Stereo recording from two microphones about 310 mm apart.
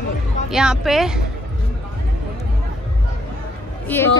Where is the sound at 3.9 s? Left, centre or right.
Centre.